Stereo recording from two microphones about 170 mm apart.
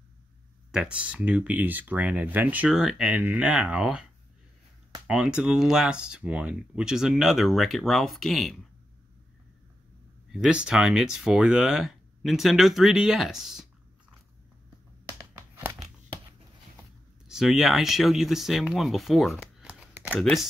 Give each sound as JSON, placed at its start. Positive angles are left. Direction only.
{"t": 0.7, "sound": "speech", "side_deg": -5}
{"t": 5.0, "sound": "speech", "side_deg": -5}
{"t": 10.3, "sound": "speech", "side_deg": -5}
{"t": 17.3, "sound": "speech", "side_deg": 0}